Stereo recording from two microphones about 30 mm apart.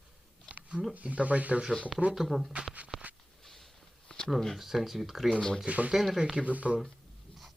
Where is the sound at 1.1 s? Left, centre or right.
Right.